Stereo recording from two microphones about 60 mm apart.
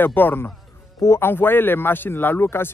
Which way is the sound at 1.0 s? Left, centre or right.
Left.